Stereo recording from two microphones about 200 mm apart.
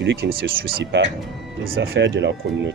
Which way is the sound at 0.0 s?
55° right (ahead or behind).